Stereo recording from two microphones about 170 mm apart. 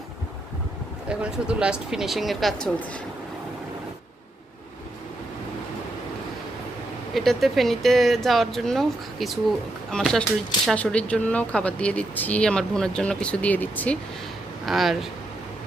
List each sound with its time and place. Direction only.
1.1 s speech: 5° right (ahead or behind)
7.1 s speech: centre (ahead or behind)